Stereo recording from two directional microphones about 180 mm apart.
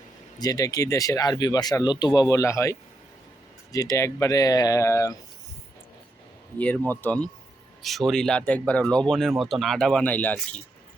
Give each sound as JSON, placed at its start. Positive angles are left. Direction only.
{"t": 0.3, "sound": "speech", "side_deg": 20}
{"t": 6.6, "sound": "speech", "side_deg": 10}